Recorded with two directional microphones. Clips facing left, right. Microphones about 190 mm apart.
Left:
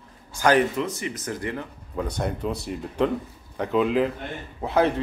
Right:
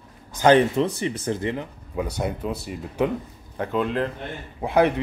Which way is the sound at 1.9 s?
10° right (ahead or behind).